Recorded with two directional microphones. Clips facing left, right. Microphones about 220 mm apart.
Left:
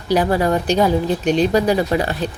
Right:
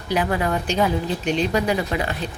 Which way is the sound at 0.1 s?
35° left (ahead or behind).